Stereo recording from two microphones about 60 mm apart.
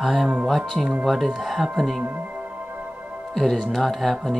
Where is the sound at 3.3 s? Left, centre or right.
Centre.